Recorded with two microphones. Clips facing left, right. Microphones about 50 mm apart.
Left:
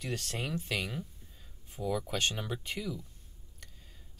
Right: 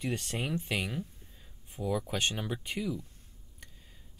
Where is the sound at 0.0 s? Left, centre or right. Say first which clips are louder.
Right 3 dB; centre.